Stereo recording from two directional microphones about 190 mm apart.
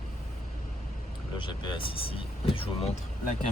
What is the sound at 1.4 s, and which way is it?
Speech, 25° left (ahead or behind).